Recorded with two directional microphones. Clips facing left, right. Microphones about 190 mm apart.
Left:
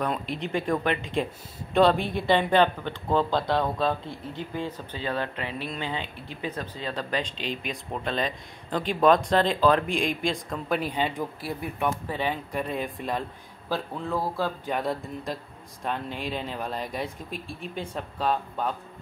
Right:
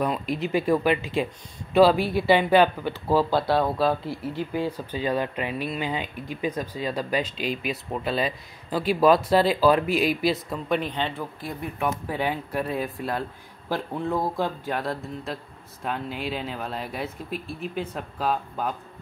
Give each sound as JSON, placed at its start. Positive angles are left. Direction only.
{"t": 0.0, "sound": "speech", "side_deg": -5}
{"t": 10.8, "sound": "speech", "side_deg": 10}
{"t": 11.9, "sound": "speech", "side_deg": -10}
{"t": 13.7, "sound": "speech", "side_deg": -15}
{"t": 14.7, "sound": "speech", "side_deg": 0}